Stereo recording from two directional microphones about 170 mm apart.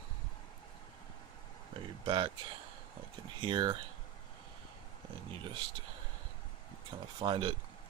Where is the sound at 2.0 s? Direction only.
30° right (ahead or behind).